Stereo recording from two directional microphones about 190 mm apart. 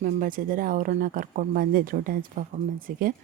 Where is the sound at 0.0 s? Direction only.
45° right (ahead or behind).